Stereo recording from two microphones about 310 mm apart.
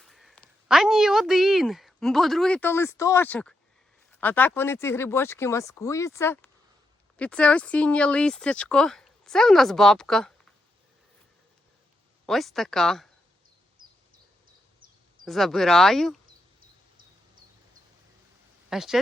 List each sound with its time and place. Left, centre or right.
0.0 s speech: centre
12.2 s speech: centre
13.8 s a sound: centre
15.2 s speech: centre
18.7 s speech: centre